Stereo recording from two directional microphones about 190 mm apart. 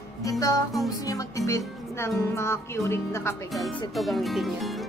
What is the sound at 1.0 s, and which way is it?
Speech, 20° left (ahead or behind).